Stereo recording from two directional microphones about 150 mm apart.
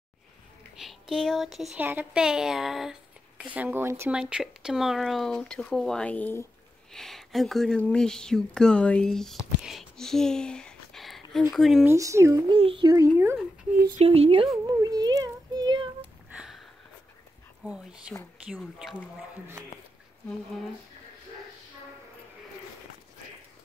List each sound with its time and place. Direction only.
0.7 s speech: centre (ahead or behind)
1.8 s speech: 15° right (ahead or behind)
4.1 s speech: 5° right (ahead or behind)
9.6 s a sound: centre (ahead or behind)
11.5 s speech: centre (ahead or behind)
11.8 s speech: 20° right (ahead or behind)
12.5 s speech: 35° right (ahead or behind)
12.9 s speech: 20° right (ahead or behind)
13.9 s speech: 40° right (ahead or behind)
14.7 s a sound: 25° right (ahead or behind)
16.3 s a sound: 5° right (ahead or behind)
18.6 s speech: centre (ahead or behind)